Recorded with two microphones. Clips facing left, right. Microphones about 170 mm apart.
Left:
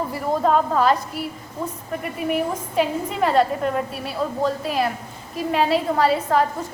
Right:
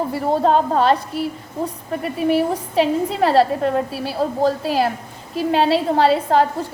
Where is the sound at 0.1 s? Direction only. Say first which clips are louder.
Right 2 dB; 30° right (ahead or behind).